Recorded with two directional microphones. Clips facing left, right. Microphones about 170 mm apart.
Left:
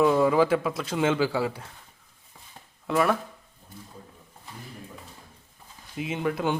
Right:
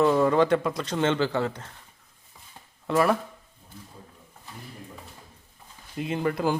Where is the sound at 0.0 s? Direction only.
5° left (ahead or behind).